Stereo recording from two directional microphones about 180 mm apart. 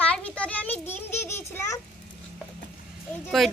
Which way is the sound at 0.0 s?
5° left (ahead or behind).